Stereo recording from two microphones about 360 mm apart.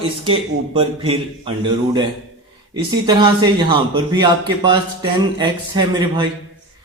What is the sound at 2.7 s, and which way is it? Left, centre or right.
A man's voice, centre.